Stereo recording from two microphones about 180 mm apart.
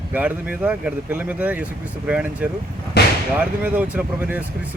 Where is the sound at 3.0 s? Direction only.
65° left (ahead or behind).